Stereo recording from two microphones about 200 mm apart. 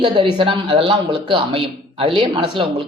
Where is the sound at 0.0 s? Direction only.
25° right (ahead or behind).